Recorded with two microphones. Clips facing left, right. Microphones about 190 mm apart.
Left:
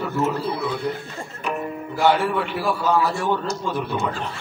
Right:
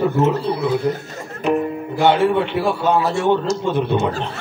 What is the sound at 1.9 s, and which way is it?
A man's voice, 25° right (ahead or behind).